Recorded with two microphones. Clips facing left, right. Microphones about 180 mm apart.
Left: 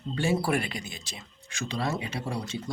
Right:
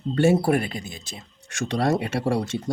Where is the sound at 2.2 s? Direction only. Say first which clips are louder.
Right 10 dB; 85° right.